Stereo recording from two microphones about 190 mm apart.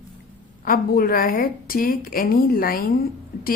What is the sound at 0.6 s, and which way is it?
A woman's voice, 50° left (ahead or behind).